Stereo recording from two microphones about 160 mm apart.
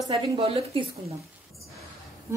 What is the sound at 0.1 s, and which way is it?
A woman's voice, 40° right (ahead or behind).